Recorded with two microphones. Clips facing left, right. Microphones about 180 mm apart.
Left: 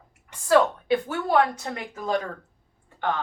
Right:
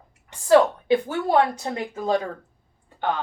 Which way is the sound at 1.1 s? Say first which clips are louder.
Right 2 dB; 30° right (ahead or behind).